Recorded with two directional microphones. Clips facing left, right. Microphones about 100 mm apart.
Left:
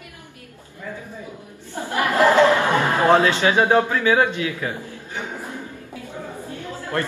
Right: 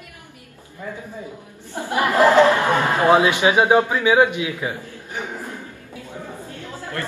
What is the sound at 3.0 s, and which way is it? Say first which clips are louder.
A man's voice: right 1 dB; 15° right (ahead or behind).